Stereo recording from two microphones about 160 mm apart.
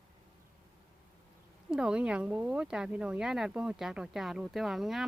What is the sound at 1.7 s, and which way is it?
Speech, 5° right (ahead or behind).